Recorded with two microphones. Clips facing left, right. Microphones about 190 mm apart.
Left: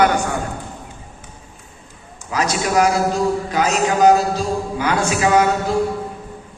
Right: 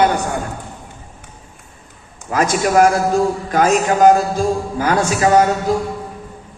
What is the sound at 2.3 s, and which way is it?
A man's voice, 50° right (ahead or behind).